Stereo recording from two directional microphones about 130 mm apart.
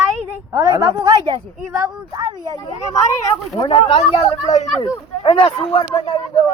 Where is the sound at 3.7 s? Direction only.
50° left (ahead or behind).